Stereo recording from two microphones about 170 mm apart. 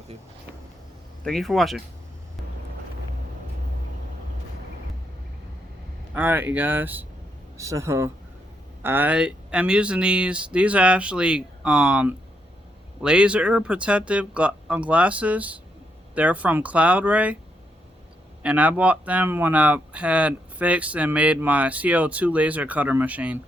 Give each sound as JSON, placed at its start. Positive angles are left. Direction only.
{"t": 1.2, "sound": "speech", "side_deg": 0}
{"t": 6.1, "sound": "speech", "side_deg": -10}
{"t": 18.4, "sound": "speech", "side_deg": -10}